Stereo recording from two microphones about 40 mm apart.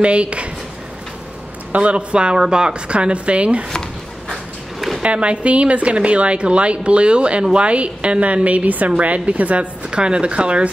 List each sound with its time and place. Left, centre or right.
0.0 s a woman's voice: right
1.7 s a woman's voice: right
5.0 s a woman's voice: right
9.8 s a woman's voice: right